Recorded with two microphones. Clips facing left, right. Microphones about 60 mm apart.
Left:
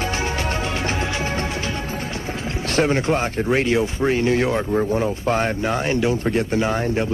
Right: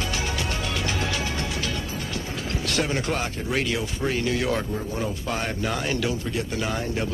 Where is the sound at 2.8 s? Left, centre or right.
Left.